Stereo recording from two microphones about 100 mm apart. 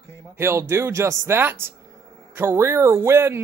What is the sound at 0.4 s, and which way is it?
Speech, 25° right (ahead or behind).